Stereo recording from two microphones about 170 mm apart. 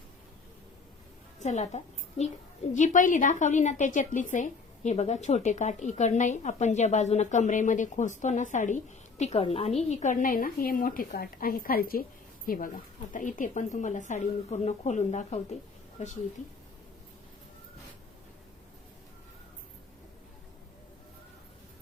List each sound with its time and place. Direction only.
1.4 s a woman's voice: 45° left (ahead or behind)